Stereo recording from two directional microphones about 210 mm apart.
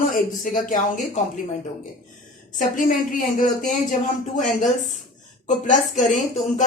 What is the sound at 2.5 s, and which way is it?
Speech, 40° left (ahead or behind).